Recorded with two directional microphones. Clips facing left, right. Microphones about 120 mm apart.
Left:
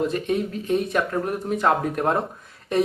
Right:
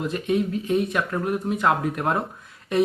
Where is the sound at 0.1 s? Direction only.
35° left (ahead or behind).